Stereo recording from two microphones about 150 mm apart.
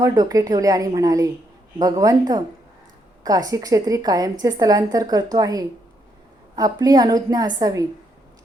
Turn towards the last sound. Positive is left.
turn(degrees=-25)  # may be behind; listen again after turning